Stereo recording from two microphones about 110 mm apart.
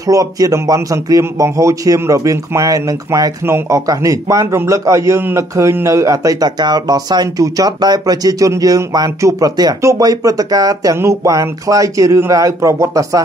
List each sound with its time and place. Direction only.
0.0 s a man's voice: 30° right (ahead or behind)